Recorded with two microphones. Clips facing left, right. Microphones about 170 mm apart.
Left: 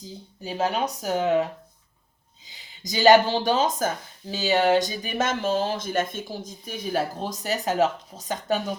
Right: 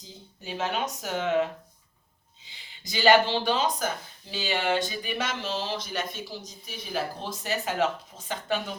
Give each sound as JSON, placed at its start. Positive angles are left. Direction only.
{"t": 0.4, "sound": "speech", "side_deg": 40}
{"t": 2.8, "sound": "speech", "side_deg": 40}